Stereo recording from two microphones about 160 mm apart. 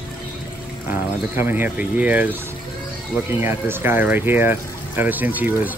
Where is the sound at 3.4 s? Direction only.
15° right (ahead or behind).